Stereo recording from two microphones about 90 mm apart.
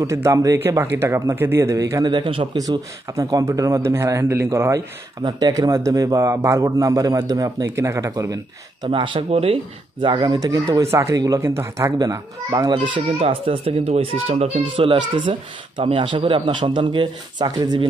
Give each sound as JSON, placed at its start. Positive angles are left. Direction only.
{"t": 0.0, "sound": "a man's voice", "side_deg": -35}
{"t": 0.6, "sound": "a man's voice", "side_deg": -30}
{"t": 2.0, "sound": "speech", "side_deg": -65}
{"t": 2.5, "sound": "a man's voice", "side_deg": -45}
{"t": 5.2, "sound": "a man's voice", "side_deg": -45}
{"t": 8.8, "sound": "speech", "side_deg": -65}
{"t": 10.0, "sound": "a man's voice", "side_deg": -55}
{"t": 12.6, "sound": "speech", "side_deg": -65}